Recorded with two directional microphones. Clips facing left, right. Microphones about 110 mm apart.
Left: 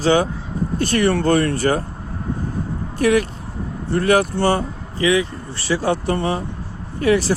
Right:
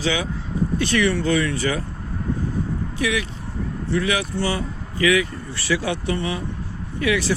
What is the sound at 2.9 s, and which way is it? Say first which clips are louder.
Speech: left 9 dB; 45° left (ahead or behind).